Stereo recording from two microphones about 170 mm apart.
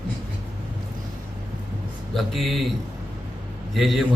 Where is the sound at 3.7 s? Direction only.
Centre (ahead or behind).